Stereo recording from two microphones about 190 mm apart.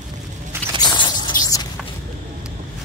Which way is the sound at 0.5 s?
10° right (ahead or behind).